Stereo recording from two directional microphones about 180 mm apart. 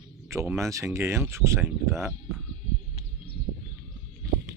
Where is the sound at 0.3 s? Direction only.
15° right (ahead or behind).